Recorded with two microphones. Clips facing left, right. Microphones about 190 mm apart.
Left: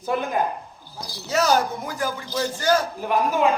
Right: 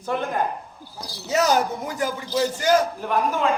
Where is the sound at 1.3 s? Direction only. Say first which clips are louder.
Even; 20° right (ahead or behind).